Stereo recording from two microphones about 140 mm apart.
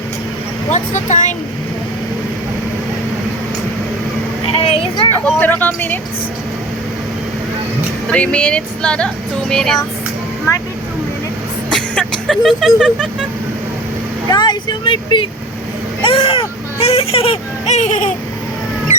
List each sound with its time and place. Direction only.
0.7 s speech: 60° left (ahead or behind)
4.5 s a sound: 40° left (ahead or behind)
5.2 s speech: 10° left (ahead or behind)
8.0 s speech: 10° left (ahead or behind)
11.7 s music: 5° left (ahead or behind)
14.3 s speech: 30° left (ahead or behind); by 18.1 s 55° left (ahead or behind)